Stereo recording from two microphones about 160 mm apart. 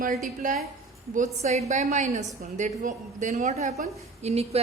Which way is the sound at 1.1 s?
45° right (ahead or behind).